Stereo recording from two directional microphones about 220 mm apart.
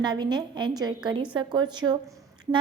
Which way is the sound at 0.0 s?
20° right (ahead or behind).